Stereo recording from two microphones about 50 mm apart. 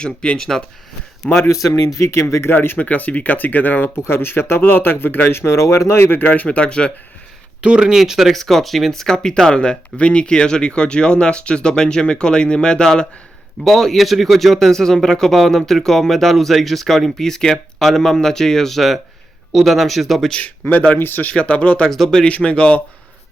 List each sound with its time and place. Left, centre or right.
0.0 s speech: centre
1.2 s speech: left
1.7 s speech: left
2.5 s speech: left
5.4 s speech: left
6.7 s speech: left
7.6 s speech: centre
8.4 s speech: centre
13.7 s speech: centre
20.4 s speech: left
21.0 s speech: left
21.2 s speech: left
21.8 s speech: centre
22.2 s speech: left